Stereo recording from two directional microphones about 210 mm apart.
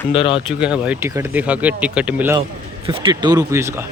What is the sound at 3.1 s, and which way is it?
Speech, 20° right (ahead or behind).